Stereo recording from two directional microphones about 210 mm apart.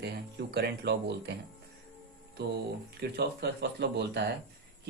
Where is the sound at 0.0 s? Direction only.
50° right (ahead or behind).